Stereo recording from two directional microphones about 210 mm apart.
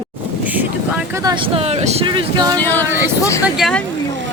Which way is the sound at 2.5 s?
10° left (ahead or behind).